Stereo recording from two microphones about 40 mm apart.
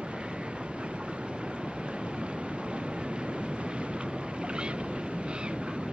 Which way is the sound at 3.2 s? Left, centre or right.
Right.